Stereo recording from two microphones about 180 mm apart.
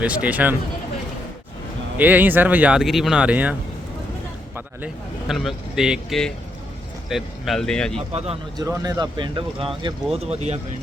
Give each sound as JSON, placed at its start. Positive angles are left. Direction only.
{"t": 0.0, "sound": "speech", "side_deg": -5}
{"t": 2.0, "sound": "speech", "side_deg": -10}
{"t": 5.3, "sound": "speech", "side_deg": 0}
{"t": 8.1, "sound": "speech", "side_deg": -35}
{"t": 8.5, "sound": "speech", "side_deg": -20}